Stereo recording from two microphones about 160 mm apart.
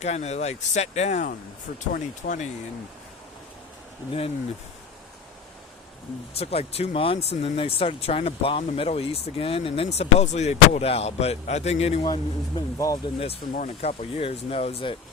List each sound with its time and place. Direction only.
0.0 s speech: 45° left (ahead or behind)
6.3 s speech: 40° left (ahead or behind)
12.0 s speech: 25° left (ahead or behind)
13.1 s speech: 40° left (ahead or behind)
13.4 s speech: 55° left (ahead or behind); by 14.9 s 35° left (ahead or behind)